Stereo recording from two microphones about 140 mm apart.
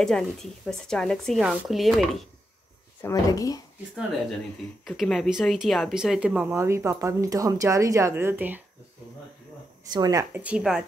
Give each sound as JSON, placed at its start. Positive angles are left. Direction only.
{"t": 0.0, "sound": "speech", "side_deg": 5}
{"t": 3.0, "sound": "speech", "side_deg": 25}
{"t": 4.8, "sound": "speech", "side_deg": 0}
{"t": 6.4, "sound": "speech", "side_deg": -20}
{"t": 9.9, "sound": "speech", "side_deg": -30}
{"t": 10.3, "sound": "speech", "side_deg": -10}